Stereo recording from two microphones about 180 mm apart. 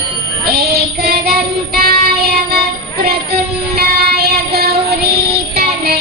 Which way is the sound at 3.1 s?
60° right (ahead or behind).